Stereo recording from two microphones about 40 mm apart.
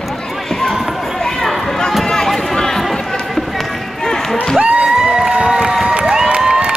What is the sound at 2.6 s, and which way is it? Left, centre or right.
Run, centre.